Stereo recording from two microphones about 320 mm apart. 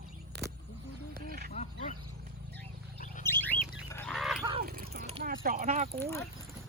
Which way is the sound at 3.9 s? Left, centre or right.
Centre.